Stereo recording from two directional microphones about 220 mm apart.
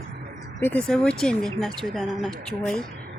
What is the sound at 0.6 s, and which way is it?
A woman's voice, 5° left (ahead or behind).